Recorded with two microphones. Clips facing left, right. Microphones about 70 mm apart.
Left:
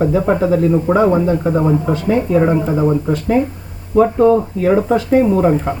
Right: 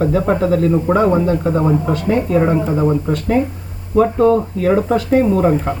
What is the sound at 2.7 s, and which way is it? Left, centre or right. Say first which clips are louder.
Speech: left 1 dB; centre.